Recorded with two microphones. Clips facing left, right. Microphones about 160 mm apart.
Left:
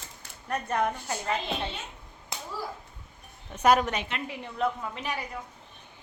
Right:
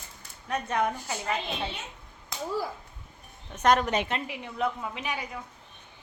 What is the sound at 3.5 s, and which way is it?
Speech, 5° left (ahead or behind).